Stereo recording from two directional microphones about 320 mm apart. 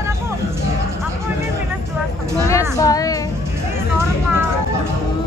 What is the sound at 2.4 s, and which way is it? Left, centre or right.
Speech, centre.